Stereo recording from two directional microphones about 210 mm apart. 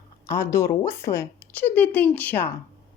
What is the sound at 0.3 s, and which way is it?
A woman's voice, 10° left (ahead or behind).